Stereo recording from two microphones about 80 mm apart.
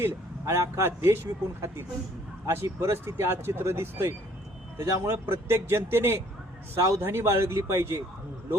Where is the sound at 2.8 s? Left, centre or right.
Right.